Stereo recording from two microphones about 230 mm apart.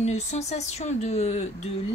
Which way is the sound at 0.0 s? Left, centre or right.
Left.